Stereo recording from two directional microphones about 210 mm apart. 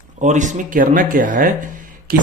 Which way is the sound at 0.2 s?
35° right (ahead or behind).